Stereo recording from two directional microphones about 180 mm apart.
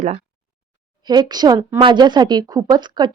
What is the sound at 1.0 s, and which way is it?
A woman's voice, 25° right (ahead or behind).